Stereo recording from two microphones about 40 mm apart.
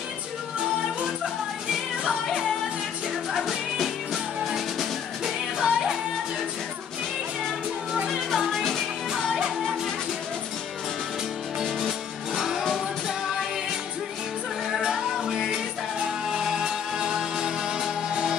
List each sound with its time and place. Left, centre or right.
3.3 s music: centre
9.1 s music: centre
12.4 s music: centre
15.2 s music: centre